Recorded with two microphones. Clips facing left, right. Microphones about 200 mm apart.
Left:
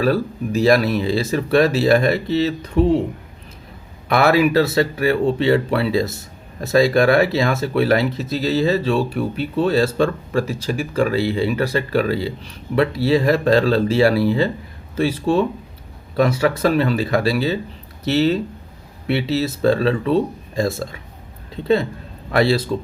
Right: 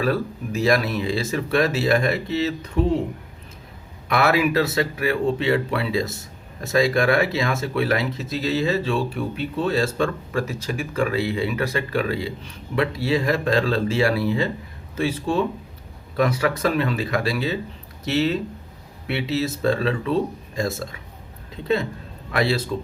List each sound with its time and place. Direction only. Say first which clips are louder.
0.0 s speech: left 4 dB; 35° left (ahead or behind)
4.1 s speech: left 4 dB; 35° left (ahead or behind)
22.3 s a man's voice: left 5 dB; 35° left (ahead or behind)